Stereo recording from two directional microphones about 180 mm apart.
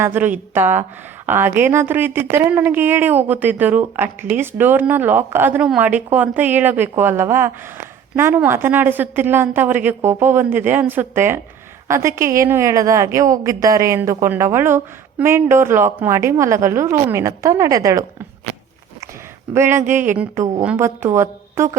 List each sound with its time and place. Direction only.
0.0 s speech: 10° right (ahead or behind)
19.5 s speech: 15° right (ahead or behind)